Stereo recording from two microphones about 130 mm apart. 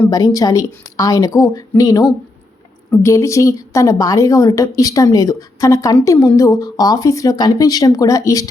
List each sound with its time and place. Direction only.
0.1 s a woman's voice: 25° left (ahead or behind)